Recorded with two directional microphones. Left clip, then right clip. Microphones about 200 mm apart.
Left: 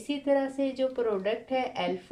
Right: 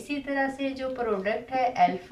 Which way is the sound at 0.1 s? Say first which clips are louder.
Left 2 dB; 40° left (ahead or behind).